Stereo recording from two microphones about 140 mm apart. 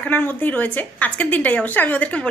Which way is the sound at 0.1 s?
15° left (ahead or behind).